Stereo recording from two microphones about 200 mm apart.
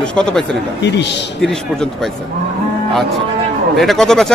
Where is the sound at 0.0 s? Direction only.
5° left (ahead or behind).